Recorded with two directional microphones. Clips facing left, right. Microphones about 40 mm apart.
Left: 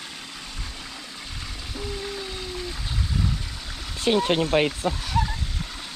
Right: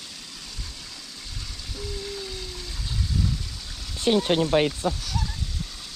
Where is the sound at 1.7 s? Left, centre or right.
Left.